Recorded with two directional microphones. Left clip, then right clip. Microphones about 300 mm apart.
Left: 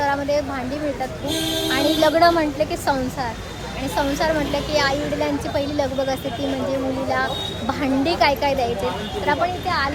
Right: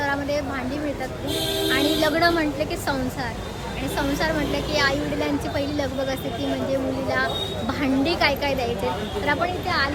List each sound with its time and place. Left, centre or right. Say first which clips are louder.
0.0 s a sound: left 4 dB; centre
1.7 s a woman's voice: left 4 dB; centre
7.7 s a woman's voice: left 3 dB; centre